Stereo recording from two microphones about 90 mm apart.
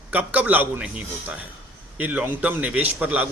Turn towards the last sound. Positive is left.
turn(degrees=-15)  # may be behind; listen again after turning